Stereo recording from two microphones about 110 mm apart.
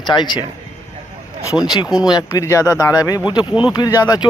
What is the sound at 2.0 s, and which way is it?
Speech, 35° left (ahead or behind).